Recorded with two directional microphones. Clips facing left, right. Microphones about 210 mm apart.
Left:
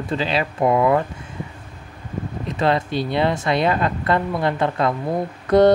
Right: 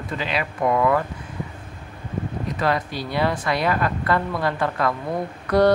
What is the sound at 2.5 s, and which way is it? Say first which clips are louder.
Speech: left 5 dB; 25° left (ahead or behind).